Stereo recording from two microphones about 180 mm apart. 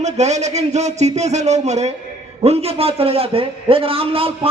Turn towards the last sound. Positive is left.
turn(degrees=-30)  # may be behind; listen again after turning